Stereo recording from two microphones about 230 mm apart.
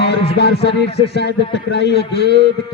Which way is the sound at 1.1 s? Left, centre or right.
Left.